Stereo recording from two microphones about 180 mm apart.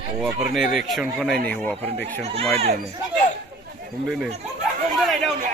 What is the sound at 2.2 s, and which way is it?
Speech, 35° right (ahead or behind).